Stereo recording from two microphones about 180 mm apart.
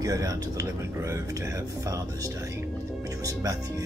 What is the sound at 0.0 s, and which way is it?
Speech, 20° right (ahead or behind).